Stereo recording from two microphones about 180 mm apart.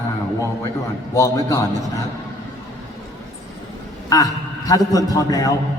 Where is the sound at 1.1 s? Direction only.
15° left (ahead or behind).